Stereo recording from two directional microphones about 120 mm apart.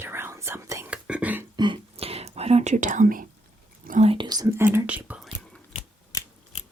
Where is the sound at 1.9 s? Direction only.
55° right (ahead or behind); by 3.1 s 90° right.